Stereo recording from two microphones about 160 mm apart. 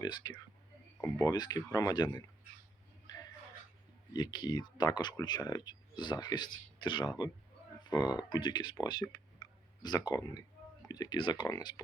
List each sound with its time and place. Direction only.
0.0 s speech: 30° left (ahead or behind)
4.1 s speech: 25° left (ahead or behind)